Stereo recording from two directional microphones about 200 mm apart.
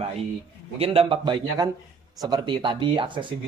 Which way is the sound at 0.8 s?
30° right (ahead or behind).